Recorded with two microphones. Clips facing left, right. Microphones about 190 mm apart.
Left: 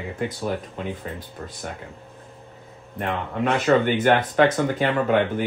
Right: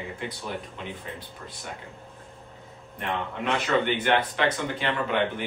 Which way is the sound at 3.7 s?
45° left (ahead or behind).